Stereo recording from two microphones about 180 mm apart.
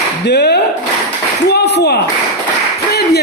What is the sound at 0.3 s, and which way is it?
A man's voice, 70° left (ahead or behind).